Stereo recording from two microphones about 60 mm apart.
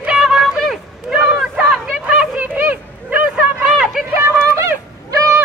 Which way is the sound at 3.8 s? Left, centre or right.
Centre.